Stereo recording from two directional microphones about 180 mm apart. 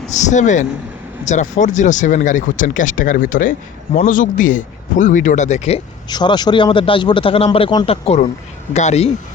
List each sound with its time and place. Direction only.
0.1 s speech: 40° left (ahead or behind)
6.1 s a man's voice: 25° left (ahead or behind); by 9.0 s 40° left (ahead or behind)